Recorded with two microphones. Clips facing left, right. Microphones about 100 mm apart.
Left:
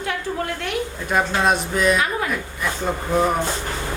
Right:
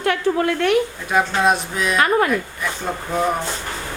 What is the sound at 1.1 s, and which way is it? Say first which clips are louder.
Speech: right 1 dB; centre (ahead or behind).